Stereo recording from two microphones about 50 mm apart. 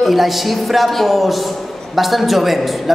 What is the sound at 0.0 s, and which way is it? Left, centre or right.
A man's voice, centre.